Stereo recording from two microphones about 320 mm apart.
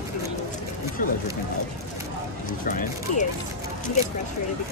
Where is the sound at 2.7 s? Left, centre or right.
Left.